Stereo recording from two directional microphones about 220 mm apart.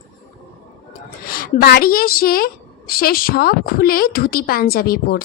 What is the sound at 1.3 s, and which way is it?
A woman's voice, 45° left (ahead or behind).